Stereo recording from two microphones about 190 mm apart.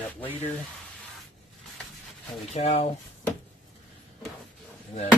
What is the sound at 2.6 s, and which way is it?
Speech, 35° left (ahead or behind).